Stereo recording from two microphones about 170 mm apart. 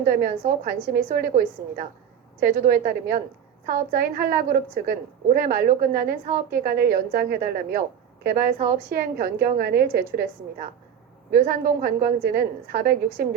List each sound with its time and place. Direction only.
0.0 s a woman's voice: 60° right (ahead or behind)
2.4 s a woman's voice: 55° right (ahead or behind)
11.3 s a woman's voice: 60° right (ahead or behind)